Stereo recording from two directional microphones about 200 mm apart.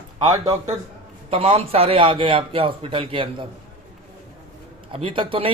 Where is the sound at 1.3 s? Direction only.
30° right (ahead or behind).